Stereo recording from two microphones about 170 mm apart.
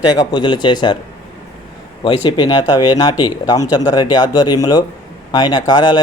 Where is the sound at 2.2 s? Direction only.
25° left (ahead or behind).